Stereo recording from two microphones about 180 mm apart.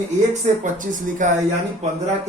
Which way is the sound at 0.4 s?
40° right (ahead or behind).